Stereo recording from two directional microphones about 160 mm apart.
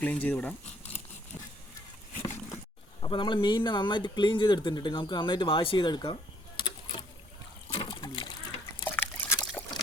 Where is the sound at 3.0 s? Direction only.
30° left (ahead or behind).